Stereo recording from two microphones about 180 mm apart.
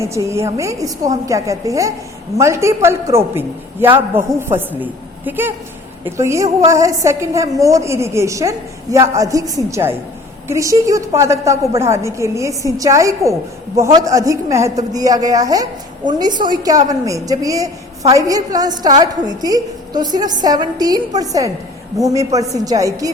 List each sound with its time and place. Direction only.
0.0 s a woman's voice: 15° right (ahead or behind)